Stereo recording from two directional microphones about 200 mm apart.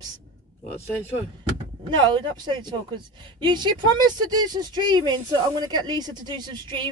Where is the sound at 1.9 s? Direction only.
20° right (ahead or behind).